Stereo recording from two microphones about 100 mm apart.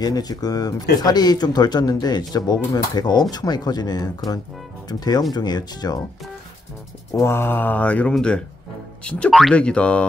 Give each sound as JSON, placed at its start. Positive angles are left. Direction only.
{"t": 0.0, "sound": "speech", "side_deg": 40}
{"t": 7.2, "sound": "speech", "side_deg": 25}